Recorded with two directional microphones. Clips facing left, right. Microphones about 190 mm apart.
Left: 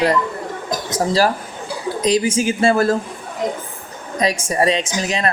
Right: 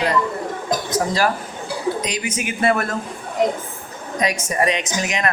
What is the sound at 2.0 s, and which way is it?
Speech, 35° left (ahead or behind).